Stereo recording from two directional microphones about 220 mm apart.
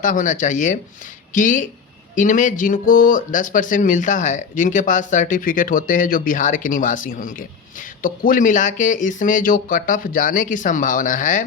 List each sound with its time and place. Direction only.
0.0 s speech: 35° left (ahead or behind)